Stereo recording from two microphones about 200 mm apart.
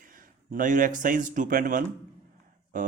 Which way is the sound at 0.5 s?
40° right (ahead or behind).